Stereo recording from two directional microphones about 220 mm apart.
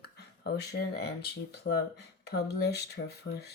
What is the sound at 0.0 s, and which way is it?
Speech, 45° left (ahead or behind).